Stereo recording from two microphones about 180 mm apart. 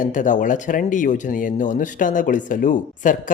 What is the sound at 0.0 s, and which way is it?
Speech, 45° left (ahead or behind).